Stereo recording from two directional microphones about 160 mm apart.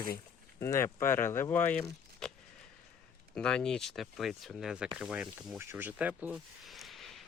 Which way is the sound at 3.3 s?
5° left (ahead or behind).